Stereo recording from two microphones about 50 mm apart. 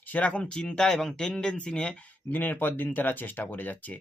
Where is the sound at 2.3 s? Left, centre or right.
Left.